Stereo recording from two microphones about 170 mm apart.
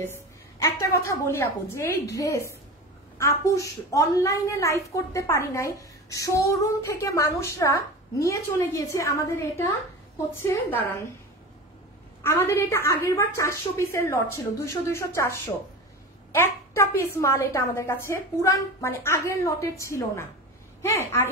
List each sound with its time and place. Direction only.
0.0 s a woman's voice: 15° left (ahead or behind)
12.2 s a woman's voice: 15° left (ahead or behind)